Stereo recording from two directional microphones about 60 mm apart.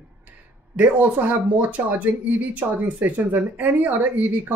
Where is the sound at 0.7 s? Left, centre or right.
Right.